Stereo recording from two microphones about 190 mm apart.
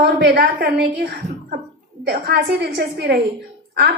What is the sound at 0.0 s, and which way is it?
Speech, 60° right (ahead or behind).